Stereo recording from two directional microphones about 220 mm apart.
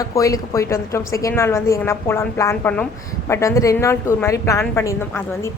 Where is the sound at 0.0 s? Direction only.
15° left (ahead or behind).